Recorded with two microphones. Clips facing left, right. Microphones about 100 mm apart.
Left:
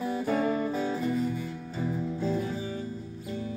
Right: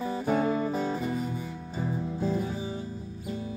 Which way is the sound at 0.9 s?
15° right (ahead or behind).